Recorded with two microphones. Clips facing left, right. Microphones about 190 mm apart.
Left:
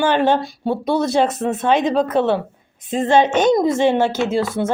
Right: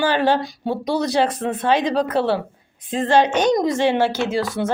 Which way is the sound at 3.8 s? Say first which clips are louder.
Left 2 dB; 50° left (ahead or behind).